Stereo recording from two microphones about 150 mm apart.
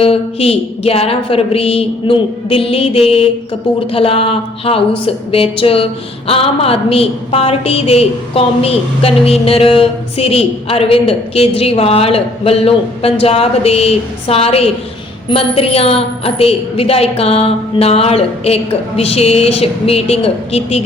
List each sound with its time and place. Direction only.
0.0 s a woman's voice: 40° left (ahead or behind)